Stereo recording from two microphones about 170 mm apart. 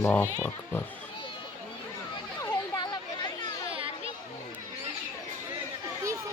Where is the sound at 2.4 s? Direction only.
25° left (ahead or behind).